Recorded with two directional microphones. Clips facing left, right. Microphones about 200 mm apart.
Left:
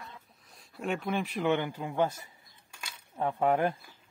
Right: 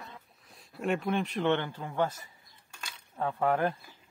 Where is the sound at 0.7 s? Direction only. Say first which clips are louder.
Right 2 dB; centre (ahead or behind).